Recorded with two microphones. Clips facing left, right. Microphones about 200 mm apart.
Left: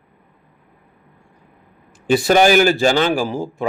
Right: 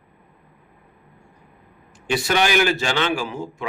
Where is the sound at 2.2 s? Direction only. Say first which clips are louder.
Left 7 dB; 40° left (ahead or behind).